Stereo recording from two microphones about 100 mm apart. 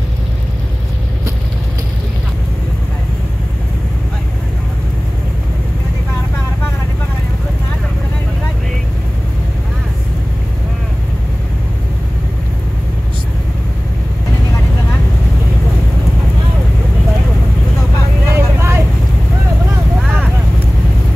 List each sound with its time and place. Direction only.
18.3 s vehicle: 25° right (ahead or behind)